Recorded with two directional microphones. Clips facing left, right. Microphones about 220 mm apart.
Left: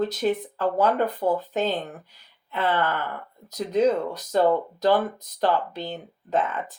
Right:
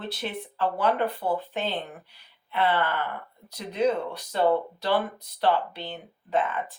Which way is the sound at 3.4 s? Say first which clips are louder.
Left 4 dB; 40° left (ahead or behind).